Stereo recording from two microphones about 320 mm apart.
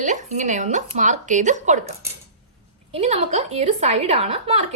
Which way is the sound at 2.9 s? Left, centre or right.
Right.